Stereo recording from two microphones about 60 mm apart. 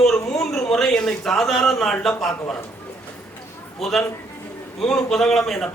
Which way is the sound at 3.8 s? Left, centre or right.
Centre.